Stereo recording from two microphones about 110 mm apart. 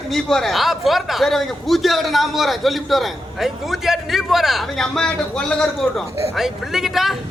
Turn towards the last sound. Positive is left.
turn(degrees=0)  # may be behind; listen again after turning